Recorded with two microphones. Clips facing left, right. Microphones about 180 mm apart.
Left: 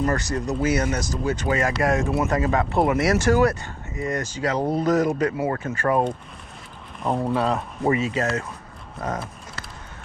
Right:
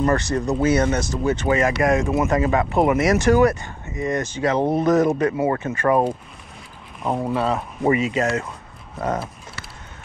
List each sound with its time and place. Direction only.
0.1 s speech: 30° right (ahead or behind)
7.0 s speech: centre (ahead or behind)
7.9 s speech: 15° right (ahead or behind)
9.0 s speech: 30° right (ahead or behind)